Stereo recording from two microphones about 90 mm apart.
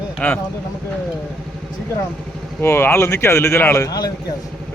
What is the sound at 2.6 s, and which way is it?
Speech, 25° left (ahead or behind).